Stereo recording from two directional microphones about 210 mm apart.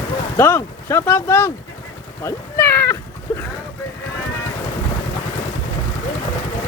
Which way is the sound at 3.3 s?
10° left (ahead or behind).